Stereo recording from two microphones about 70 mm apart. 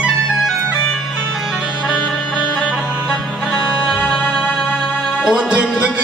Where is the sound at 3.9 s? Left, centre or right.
Centre.